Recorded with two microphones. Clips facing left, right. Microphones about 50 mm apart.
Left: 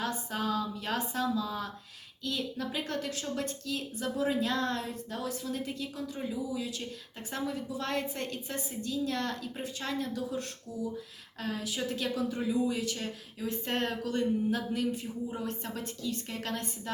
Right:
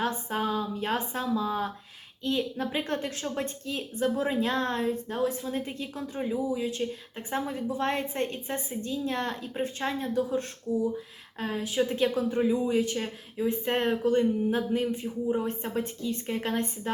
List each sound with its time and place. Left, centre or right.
0.0 s a woman's voice: right